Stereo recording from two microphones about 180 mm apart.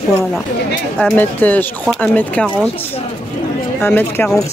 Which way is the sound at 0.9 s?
10° left (ahead or behind).